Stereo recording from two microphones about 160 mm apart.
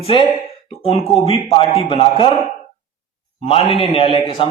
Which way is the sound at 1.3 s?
35° left (ahead or behind).